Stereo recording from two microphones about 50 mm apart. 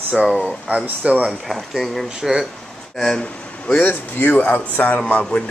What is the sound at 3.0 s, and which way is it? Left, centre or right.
Speech, centre.